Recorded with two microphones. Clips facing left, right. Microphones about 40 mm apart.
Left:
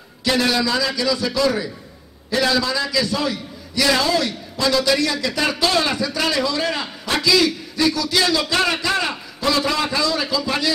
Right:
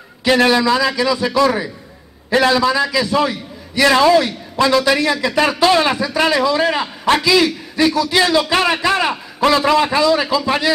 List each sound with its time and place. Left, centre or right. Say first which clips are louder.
0.3 s a man's voice: right 6 dB; right